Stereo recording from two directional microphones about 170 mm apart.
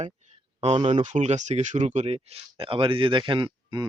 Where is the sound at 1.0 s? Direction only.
45° right (ahead or behind).